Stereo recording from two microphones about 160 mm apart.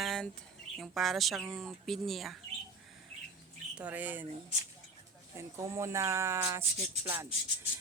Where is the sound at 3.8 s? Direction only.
10° right (ahead or behind).